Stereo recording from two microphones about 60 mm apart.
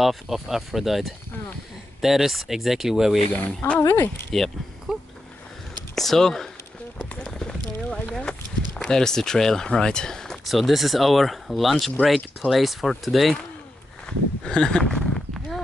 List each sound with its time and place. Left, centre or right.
0.0 s speech: centre
3.3 s speech: centre
3.9 s speech: left
4.9 s a sound: centre
5.9 s speech: centre
7.2 s clip-clop: centre
8.2 s a sound: centre
10.5 s speech: centre
14.0 s a sound: centre